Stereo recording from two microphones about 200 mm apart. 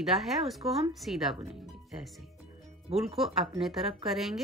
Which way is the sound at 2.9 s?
30° right (ahead or behind).